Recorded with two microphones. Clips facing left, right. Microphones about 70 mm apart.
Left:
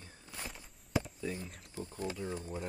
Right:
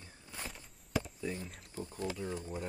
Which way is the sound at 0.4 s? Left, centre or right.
Centre.